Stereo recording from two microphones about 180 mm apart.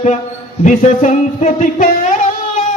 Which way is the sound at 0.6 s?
45° left (ahead or behind).